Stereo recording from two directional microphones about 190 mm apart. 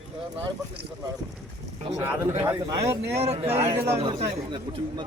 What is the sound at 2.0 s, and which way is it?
A man's voice, 15° right (ahead or behind).